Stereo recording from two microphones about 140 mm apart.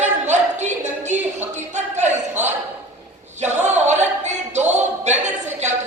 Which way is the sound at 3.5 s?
55° right (ahead or behind).